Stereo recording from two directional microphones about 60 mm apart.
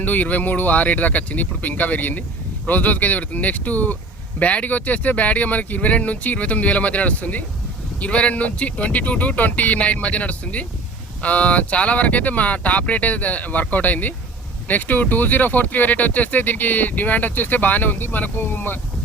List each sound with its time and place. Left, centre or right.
0.0 s speech: left